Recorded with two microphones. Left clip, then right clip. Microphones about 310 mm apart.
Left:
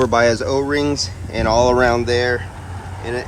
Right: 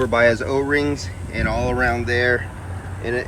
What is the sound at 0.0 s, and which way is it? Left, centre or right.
Speech, centre.